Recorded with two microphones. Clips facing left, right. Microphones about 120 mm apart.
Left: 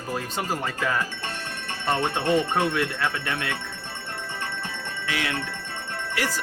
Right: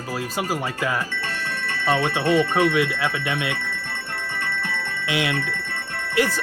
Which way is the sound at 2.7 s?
10° right (ahead or behind).